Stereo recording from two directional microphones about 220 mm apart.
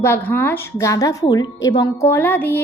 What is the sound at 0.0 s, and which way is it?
A woman's voice, 10° left (ahead or behind).